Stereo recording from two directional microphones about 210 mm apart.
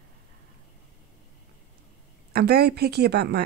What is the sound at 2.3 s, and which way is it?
Speech, 50° right (ahead or behind).